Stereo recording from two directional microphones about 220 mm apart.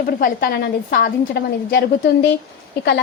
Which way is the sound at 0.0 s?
40° left (ahead or behind).